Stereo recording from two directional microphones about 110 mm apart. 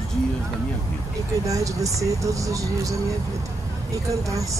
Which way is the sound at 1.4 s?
30° right (ahead or behind).